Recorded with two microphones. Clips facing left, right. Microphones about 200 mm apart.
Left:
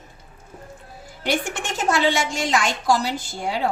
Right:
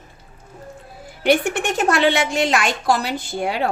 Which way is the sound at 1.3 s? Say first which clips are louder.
Right 7 dB; 60° right (ahead or behind).